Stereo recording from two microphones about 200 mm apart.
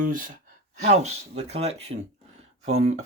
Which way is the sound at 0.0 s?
40° right (ahead or behind).